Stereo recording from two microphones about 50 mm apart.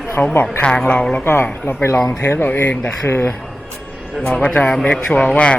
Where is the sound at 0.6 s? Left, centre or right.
Centre.